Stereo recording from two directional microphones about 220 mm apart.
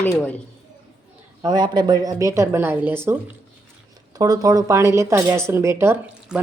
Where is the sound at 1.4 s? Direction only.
20° right (ahead or behind).